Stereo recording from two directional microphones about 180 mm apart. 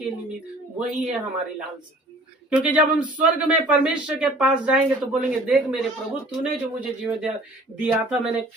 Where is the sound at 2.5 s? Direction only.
5° right (ahead or behind).